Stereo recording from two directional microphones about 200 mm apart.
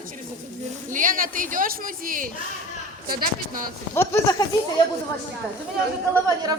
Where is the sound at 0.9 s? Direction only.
45° right (ahead or behind).